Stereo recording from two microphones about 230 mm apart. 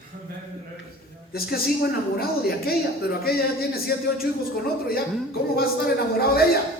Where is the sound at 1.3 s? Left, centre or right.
Left.